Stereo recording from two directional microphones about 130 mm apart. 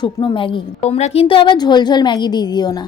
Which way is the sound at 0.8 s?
60° left (ahead or behind).